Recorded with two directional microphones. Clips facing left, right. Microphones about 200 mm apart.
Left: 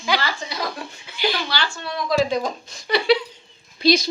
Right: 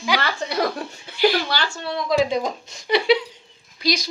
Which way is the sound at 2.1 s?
20° right (ahead or behind).